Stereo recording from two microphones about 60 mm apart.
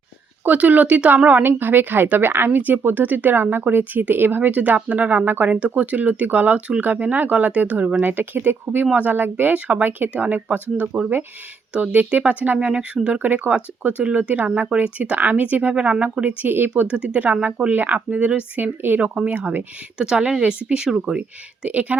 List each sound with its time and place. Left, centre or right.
0.4 s a woman's voice: right
16.5 s speech: right
16.9 s a woman's voice: right
20.0 s a woman's voice: centre